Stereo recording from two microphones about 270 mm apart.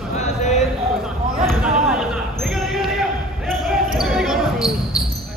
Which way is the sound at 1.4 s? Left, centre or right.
Centre.